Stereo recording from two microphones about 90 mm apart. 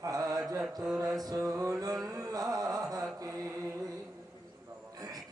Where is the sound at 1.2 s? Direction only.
40° right (ahead or behind).